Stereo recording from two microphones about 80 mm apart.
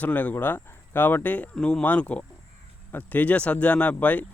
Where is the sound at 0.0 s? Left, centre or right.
Left.